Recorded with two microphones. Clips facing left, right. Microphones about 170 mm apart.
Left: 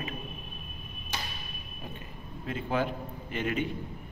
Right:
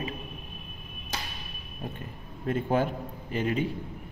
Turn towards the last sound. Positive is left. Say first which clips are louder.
# right 3 dB
turn(degrees=-35)  # may be behind; listen again after turning